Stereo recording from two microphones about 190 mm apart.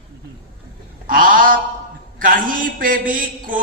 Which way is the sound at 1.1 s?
45° right (ahead or behind).